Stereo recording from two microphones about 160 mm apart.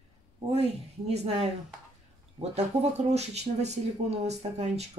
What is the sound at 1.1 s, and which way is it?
Speech, 40° right (ahead or behind).